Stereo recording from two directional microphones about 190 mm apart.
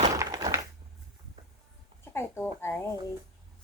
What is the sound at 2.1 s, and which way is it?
Speech, 10° left (ahead or behind).